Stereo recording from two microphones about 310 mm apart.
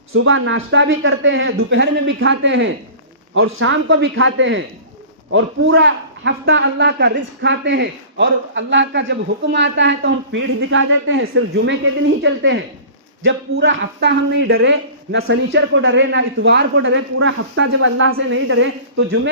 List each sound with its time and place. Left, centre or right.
0.1 s speech: right